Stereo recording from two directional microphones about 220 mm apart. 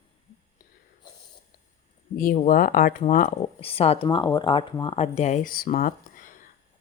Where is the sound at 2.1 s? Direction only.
40° left (ahead or behind).